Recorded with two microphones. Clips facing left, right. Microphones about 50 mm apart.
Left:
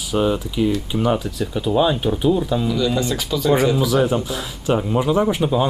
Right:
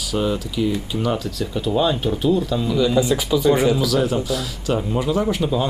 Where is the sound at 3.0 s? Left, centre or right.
Centre.